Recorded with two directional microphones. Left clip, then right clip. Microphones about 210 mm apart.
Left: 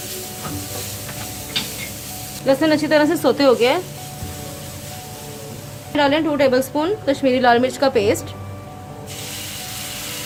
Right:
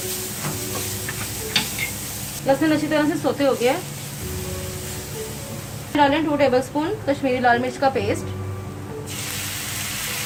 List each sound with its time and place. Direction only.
2.6 s a woman's voice: 50° left (ahead or behind)
6.0 s a woman's voice: 50° left (ahead or behind)